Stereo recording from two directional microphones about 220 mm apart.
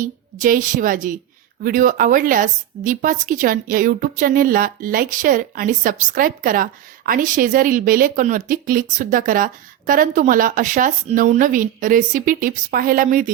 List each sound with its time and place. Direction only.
0.0 s a woman's voice: 35° right (ahead or behind)